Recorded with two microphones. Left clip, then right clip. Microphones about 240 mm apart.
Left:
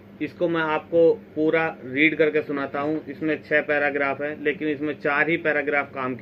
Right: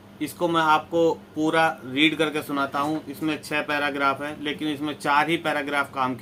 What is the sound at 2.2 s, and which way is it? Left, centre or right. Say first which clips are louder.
Speech: left 3 dB; right.